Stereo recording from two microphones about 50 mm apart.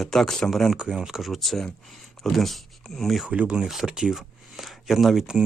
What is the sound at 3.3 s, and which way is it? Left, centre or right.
Speech, centre.